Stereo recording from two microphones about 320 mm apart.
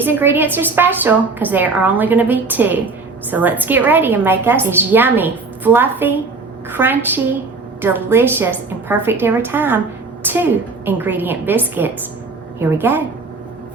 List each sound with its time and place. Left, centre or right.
0.0 s a woman's voice: centre